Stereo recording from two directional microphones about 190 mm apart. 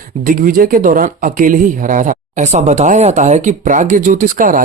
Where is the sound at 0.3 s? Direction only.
45° right (ahead or behind).